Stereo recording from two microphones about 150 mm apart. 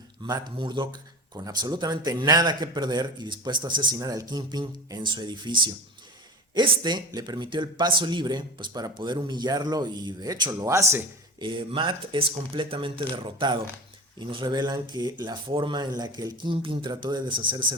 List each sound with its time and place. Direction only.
0.2 s speech: 30° right (ahead or behind)
11.4 s speech: 35° right (ahead or behind)